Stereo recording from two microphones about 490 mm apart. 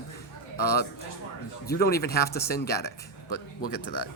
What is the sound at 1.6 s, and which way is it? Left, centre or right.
A man's voice, centre.